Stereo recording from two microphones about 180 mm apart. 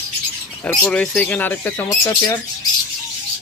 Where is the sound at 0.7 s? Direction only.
5° left (ahead or behind).